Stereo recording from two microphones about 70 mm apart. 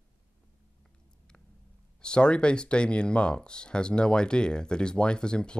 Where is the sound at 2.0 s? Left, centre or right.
Centre.